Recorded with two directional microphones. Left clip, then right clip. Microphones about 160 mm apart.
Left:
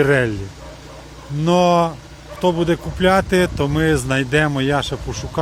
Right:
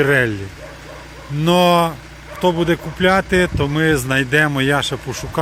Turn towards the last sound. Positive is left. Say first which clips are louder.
# right 2 dB
turn(degrees=0)  # may be behind; listen again after turning